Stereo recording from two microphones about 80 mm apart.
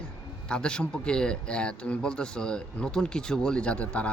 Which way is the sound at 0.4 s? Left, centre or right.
Centre.